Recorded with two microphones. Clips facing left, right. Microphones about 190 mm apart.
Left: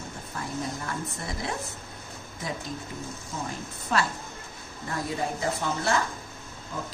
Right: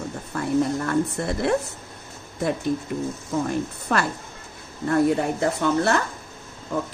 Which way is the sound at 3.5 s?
65° right (ahead or behind).